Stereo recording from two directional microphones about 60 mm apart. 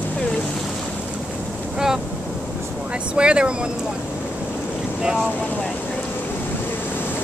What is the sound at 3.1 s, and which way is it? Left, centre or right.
Speech, centre.